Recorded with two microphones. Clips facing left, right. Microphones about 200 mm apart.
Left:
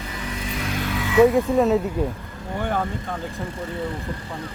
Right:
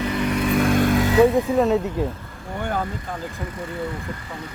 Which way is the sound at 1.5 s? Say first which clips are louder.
Even; centre (ahead or behind).